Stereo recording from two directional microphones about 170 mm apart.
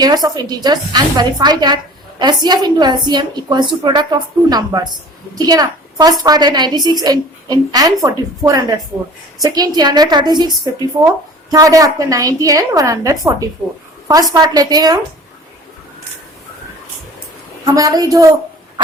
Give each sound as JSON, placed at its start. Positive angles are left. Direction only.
{"t": 0.0, "sound": "a woman's voice", "side_deg": -25}
{"t": 11.5, "sound": "a woman's voice", "side_deg": -20}
{"t": 17.7, "sound": "a woman's voice", "side_deg": -20}